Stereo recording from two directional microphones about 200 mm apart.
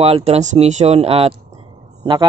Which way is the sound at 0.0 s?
30° right (ahead or behind).